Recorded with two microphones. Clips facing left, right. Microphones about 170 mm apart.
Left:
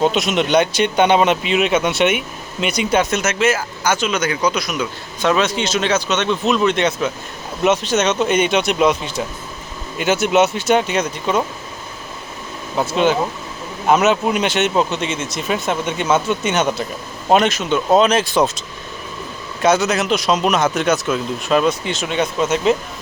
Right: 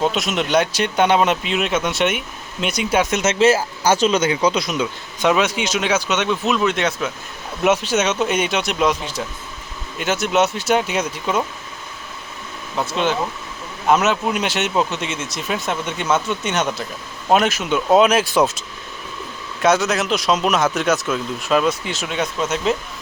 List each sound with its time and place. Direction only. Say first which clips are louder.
0.0 s speech: left 3 dB; centre (ahead or behind)
3.1 s a man's voice: right 2 dB; 25° right (ahead or behind)
5.2 s speech: even; 10° right (ahead or behind)
12.8 s speech: left 4 dB; 5° left (ahead or behind)
19.6 s speech: left 1 dB; centre (ahead or behind)